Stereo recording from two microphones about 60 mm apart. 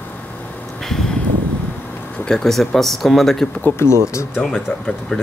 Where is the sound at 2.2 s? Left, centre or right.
Centre.